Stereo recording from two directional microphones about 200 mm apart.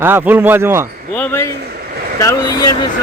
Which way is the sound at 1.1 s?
10° left (ahead or behind).